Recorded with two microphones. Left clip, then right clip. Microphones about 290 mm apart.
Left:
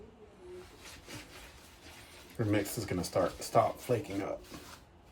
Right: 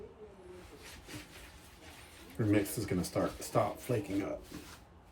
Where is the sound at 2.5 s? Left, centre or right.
Centre.